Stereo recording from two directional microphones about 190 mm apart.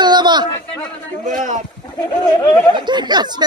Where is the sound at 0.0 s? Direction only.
25° right (ahead or behind).